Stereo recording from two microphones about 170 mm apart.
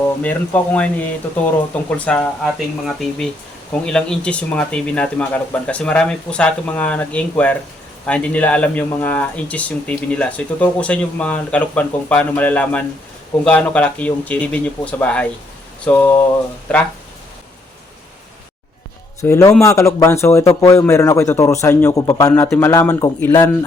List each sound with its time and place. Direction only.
0.2 s speech: 10° left (ahead or behind)
19.2 s speech: 15° left (ahead or behind)